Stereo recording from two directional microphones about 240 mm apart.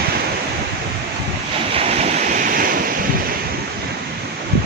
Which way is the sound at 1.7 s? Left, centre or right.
Right.